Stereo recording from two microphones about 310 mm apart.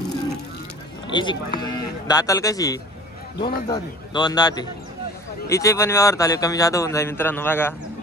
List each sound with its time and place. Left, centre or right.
1.1 s speech: centre
3.4 s a man's voice: left
3.7 s speech: centre